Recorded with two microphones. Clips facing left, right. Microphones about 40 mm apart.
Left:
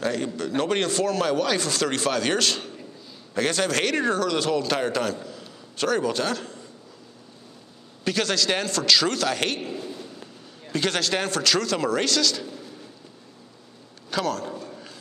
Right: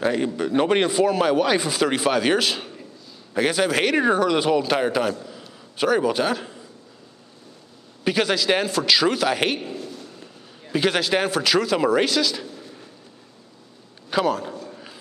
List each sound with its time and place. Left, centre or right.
0.0 s a man's voice: centre
5.2 s a sound: centre
8.0 s speech: centre
9.6 s a man's voice: centre
10.7 s speech: centre
14.1 s speech: centre
14.5 s a sound: centre